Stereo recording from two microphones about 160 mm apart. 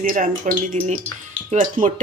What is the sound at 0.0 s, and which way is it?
Speech, 60° right (ahead or behind).